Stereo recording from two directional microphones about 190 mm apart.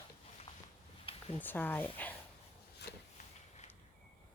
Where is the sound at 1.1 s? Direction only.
30° left (ahead or behind).